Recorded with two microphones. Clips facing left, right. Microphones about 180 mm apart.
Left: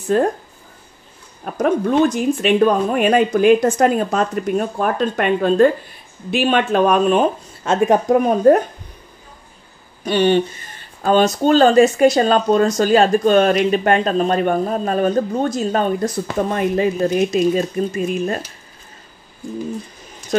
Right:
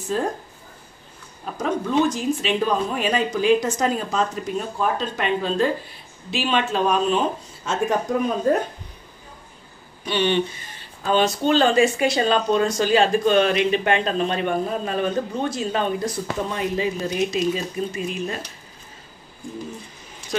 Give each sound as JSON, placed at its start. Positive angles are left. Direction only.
{"t": 0.0, "sound": "speech", "side_deg": 60}
{"t": 1.4, "sound": "speech", "side_deg": 55}
{"t": 10.0, "sound": "speech", "side_deg": 45}